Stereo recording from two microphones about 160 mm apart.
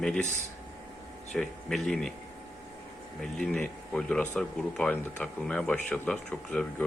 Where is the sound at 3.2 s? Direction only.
5° left (ahead or behind).